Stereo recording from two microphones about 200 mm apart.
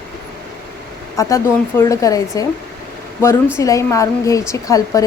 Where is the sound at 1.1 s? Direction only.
15° left (ahead or behind).